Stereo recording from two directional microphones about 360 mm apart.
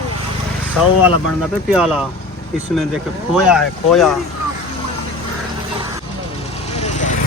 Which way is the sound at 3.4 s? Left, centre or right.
Centre.